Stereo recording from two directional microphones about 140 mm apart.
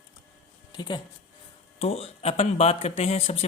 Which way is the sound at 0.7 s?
30° left (ahead or behind).